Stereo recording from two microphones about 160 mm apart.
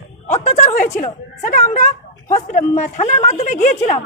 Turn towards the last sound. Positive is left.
turn(degrees=45)  # may be behind; listen again after turning